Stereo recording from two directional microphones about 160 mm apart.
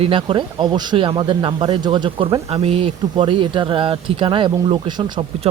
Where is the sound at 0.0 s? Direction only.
30° right (ahead or behind).